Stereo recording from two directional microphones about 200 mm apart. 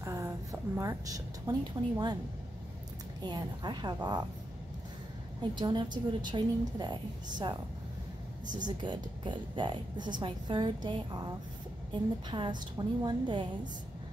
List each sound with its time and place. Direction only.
0.0 s a woman's voice: 15° right (ahead or behind)
3.3 s a woman's voice: 20° right (ahead or behind)
5.4 s a woman's voice: 20° right (ahead or behind)
8.6 s a woman's voice: 25° right (ahead or behind)
12.3 s a woman's voice: 20° right (ahead or behind)